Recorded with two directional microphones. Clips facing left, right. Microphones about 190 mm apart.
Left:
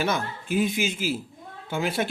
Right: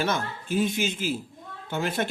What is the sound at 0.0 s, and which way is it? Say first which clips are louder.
Speech: left 1 dB; 5° left (ahead or behind).